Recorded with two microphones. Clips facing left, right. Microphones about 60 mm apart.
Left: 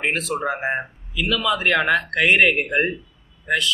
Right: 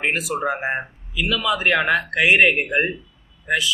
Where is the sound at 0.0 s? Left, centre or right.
Centre.